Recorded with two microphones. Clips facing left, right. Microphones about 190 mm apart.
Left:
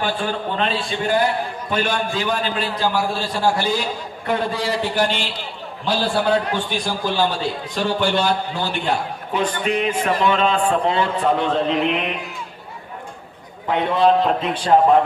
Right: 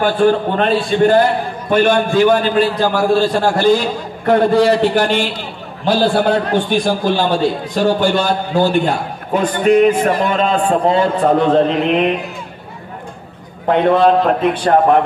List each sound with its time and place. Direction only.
0.0 s a man's voice: 50° right (ahead or behind)
13.7 s a man's voice: 55° right (ahead or behind)